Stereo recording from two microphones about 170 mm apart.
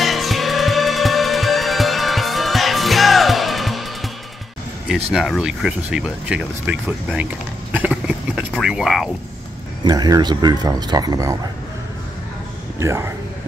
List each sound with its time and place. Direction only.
0.0 s music: centre (ahead or behind)
4.8 s speech: 5° right (ahead or behind)
7.7 s a sound: 10° right (ahead or behind)
9.8 s speech: 25° right (ahead or behind)
12.7 s speech: 15° right (ahead or behind)